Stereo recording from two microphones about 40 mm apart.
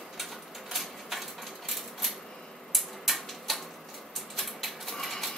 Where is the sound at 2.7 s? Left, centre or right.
Centre.